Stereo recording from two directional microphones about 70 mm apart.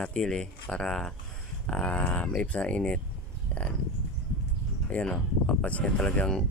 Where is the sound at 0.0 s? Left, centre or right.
Centre.